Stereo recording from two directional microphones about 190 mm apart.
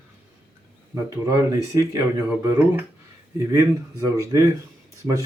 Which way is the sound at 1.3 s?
15° right (ahead or behind).